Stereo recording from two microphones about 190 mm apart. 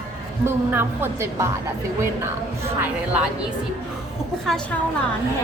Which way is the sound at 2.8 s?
5° right (ahead or behind).